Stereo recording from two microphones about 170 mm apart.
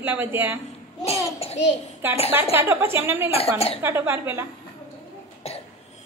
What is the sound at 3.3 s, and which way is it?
Speech, 35° left (ahead or behind).